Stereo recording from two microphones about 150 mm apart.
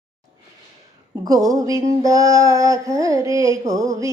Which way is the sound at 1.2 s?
25° right (ahead or behind).